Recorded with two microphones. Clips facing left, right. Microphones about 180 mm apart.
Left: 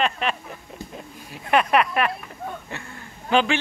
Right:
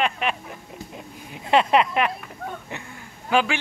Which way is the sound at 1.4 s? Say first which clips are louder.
Right 1 dB; 25° right (ahead or behind).